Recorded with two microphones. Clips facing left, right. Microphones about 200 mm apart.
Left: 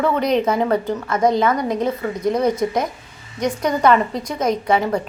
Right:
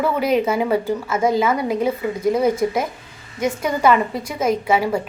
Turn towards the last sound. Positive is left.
turn(degrees=-5)  # may be behind; listen again after turning